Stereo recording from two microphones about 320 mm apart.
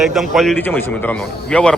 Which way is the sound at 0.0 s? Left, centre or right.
Centre.